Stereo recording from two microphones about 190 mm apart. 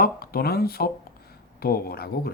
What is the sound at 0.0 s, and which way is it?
Speech, 55° left (ahead or behind).